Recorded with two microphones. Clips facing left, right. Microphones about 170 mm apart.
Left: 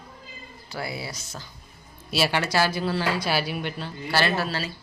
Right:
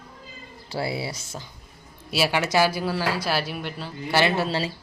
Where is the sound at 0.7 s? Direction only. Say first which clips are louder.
Right 5 dB; 30° right (ahead or behind).